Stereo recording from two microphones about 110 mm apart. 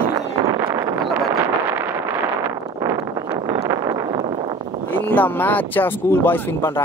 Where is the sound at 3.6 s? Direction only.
30° right (ahead or behind).